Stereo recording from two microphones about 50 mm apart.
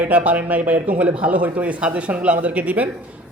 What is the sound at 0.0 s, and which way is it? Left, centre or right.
A man's voice, right.